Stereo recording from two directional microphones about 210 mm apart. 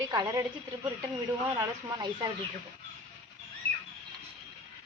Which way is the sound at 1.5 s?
20° right (ahead or behind).